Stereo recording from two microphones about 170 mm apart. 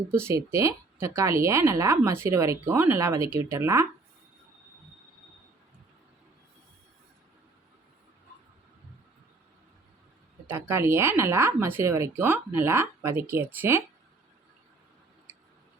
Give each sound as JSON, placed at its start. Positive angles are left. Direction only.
{"t": 0.1, "sound": "speech", "side_deg": -15}
{"t": 10.4, "sound": "speech", "side_deg": -15}